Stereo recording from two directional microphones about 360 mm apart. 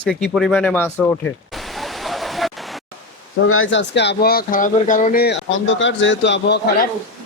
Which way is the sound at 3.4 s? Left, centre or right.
Left.